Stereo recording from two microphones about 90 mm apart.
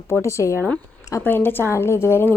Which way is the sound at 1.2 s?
25° left (ahead or behind).